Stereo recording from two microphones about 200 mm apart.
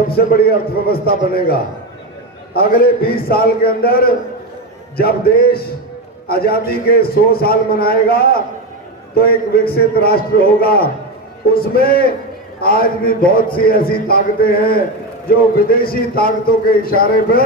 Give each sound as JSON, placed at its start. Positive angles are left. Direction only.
{"t": 0.1, "sound": "a man's voice", "side_deg": 50}